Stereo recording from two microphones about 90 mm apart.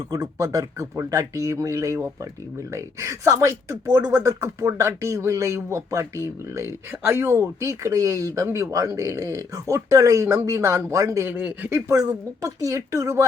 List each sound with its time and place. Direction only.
0.1 s speech: 40° right (ahead or behind)